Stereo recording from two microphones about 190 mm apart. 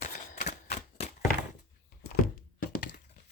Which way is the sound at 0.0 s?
55° left (ahead or behind).